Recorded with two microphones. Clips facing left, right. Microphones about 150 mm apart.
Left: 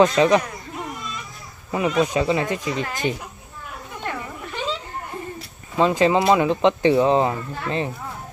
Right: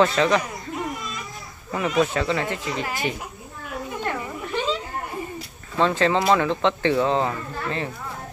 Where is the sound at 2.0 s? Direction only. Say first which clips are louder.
Left 1 dB; 15° left (ahead or behind).